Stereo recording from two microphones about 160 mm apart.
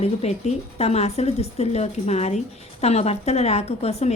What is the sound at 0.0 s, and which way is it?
A woman's voice, 40° left (ahead or behind).